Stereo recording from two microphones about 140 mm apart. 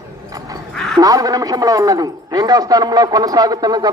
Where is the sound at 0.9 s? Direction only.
25° right (ahead or behind).